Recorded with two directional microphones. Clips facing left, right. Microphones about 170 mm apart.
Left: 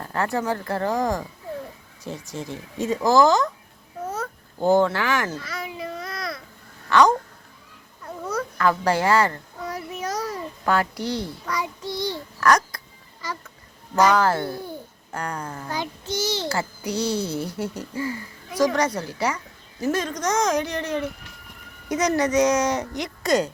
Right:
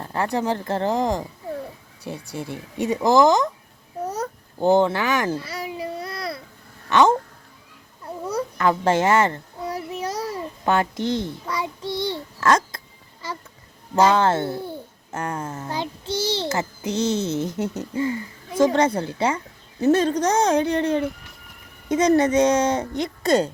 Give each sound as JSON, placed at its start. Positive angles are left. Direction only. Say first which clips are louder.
{"t": 0.0, "sound": "a child's voice", "louder": "right 1 dB", "side_deg": -15}
{"t": 4.0, "sound": "babbling", "louder": "right 2 dB", "side_deg": -40}
{"t": 4.6, "sound": "speech", "louder": "right 1 dB", "side_deg": -20}
{"t": 5.3, "sound": "a sound", "louder": "right 4 dB", "side_deg": -30}
{"t": 6.9, "sound": "a child's voice", "louder": "right 1 dB", "side_deg": -25}
{"t": 8.0, "sound": "babbling", "louder": "right 2 dB", "side_deg": -25}
{"t": 13.9, "sound": "a child's voice", "louder": "right 1 dB", "side_deg": -25}